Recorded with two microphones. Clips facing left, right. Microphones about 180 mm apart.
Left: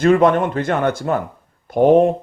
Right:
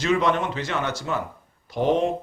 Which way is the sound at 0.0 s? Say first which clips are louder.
Left 8 dB; 55° left (ahead or behind).